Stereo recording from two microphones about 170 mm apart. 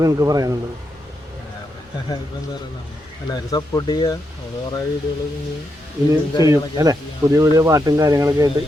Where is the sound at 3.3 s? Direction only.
25° left (ahead or behind).